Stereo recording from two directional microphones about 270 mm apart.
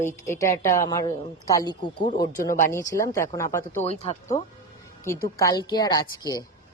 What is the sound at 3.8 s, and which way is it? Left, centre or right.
Speech, left.